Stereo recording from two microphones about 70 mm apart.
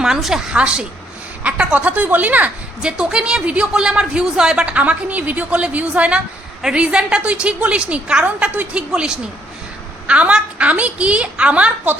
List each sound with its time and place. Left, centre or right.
0.0 s a woman's voice: centre; by 2.5 s right
2.8 s a woman's voice: centre